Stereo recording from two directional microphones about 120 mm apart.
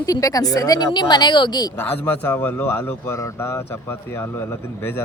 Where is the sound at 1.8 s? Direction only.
15° left (ahead or behind).